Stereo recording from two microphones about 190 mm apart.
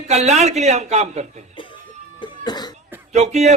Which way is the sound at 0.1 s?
35° right (ahead or behind).